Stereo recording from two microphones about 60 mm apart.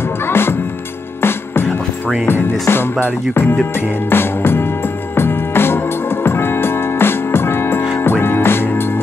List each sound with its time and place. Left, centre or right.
0.3 s music: left